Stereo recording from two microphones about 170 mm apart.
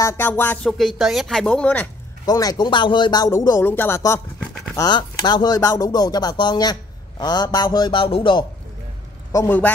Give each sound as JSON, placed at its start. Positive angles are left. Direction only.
{"t": 0.0, "sound": "speech", "side_deg": 15}
{"t": 0.7, "sound": "speech", "side_deg": 0}
{"t": 2.2, "sound": "speech", "side_deg": 20}
{"t": 9.3, "sound": "speech", "side_deg": 15}